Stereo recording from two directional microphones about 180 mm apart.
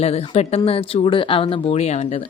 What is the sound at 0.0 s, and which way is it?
A woman's voice, 35° left (ahead or behind).